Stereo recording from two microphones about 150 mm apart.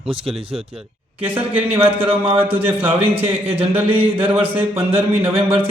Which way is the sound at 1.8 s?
40° right (ahead or behind).